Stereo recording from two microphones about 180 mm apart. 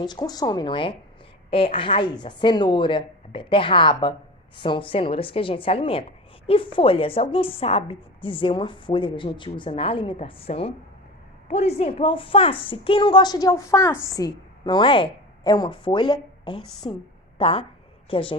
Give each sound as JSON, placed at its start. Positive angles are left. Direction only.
{"t": 0.0, "sound": "a woman's voice", "side_deg": 25}